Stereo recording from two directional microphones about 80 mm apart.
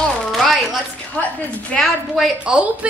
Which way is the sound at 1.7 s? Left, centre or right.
Centre.